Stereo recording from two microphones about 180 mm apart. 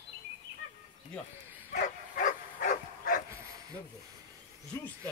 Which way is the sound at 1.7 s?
45° left (ahead or behind).